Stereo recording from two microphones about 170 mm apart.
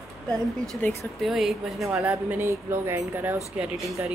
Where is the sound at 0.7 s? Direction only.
10° left (ahead or behind).